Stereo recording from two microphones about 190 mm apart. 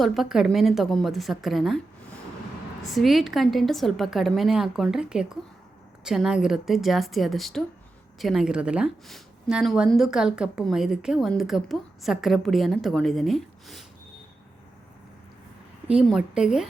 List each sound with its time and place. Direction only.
0.0 s a woman's voice: centre (ahead or behind)
2.9 s a woman's voice: centre (ahead or behind)
16.0 s a woman's voice: 5° right (ahead or behind)